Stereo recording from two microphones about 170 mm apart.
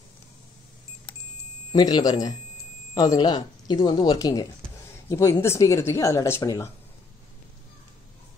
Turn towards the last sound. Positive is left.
turn(degrees=20)  # may be behind; listen again after turning